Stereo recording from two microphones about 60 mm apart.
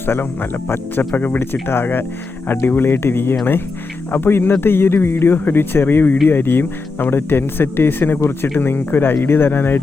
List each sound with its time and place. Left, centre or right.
0.0 s speech: left